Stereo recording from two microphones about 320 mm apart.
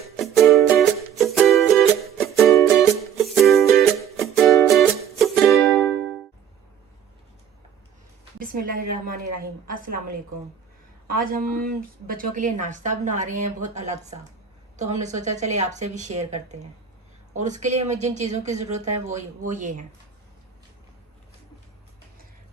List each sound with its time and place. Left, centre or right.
0.2 s music: centre
8.7 s speech: right